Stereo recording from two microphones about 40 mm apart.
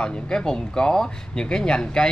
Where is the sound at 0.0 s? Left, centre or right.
Centre.